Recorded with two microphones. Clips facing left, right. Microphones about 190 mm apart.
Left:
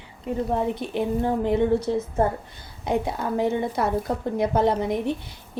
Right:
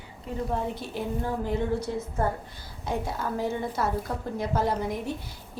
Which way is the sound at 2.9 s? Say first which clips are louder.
Left 5 dB; 20° left (ahead or behind).